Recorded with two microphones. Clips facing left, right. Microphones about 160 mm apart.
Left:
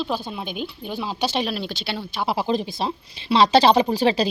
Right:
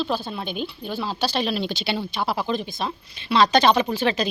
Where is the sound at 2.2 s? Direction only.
30° left (ahead or behind).